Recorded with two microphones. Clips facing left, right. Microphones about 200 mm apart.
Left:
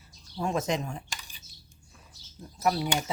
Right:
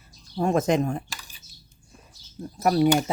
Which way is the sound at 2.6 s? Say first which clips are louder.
Right 6 dB; 55° right (ahead or behind).